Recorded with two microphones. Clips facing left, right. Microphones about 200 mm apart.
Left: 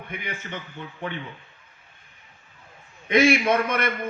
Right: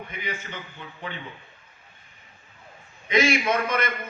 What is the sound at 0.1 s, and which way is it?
Speech, 55° left (ahead or behind).